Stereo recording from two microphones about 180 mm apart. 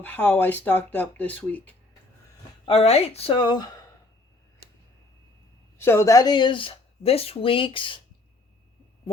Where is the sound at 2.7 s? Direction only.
35° left (ahead or behind).